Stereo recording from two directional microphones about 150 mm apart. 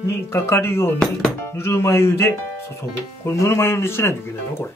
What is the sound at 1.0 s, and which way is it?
Speech, centre (ahead or behind).